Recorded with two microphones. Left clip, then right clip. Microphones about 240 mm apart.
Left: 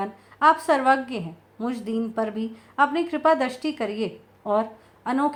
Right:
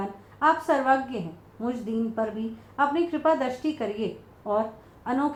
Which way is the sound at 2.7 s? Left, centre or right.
Left.